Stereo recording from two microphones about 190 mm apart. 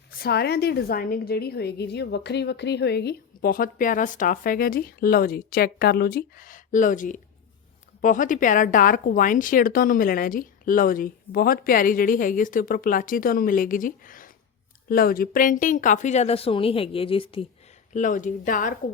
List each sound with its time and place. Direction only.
0.2 s a woman's voice: 55° left (ahead or behind); by 17.4 s 30° left (ahead or behind)
17.9 s a woman's voice: 40° left (ahead or behind)